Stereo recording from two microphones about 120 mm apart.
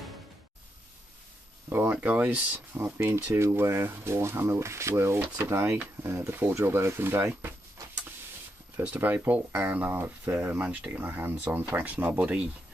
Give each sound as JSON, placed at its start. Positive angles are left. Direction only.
{"t": 1.7, "sound": "speech", "side_deg": -20}
{"t": 8.7, "sound": "speech", "side_deg": -15}